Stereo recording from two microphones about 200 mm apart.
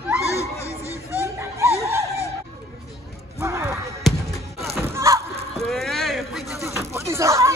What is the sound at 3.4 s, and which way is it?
Basketball bounce, 15° right (ahead or behind).